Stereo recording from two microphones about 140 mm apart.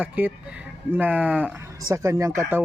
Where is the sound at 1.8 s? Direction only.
25° right (ahead or behind).